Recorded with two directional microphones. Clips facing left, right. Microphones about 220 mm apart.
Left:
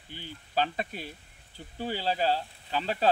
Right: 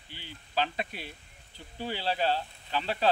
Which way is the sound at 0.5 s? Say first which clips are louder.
Left 2 dB; 45° left (ahead or behind).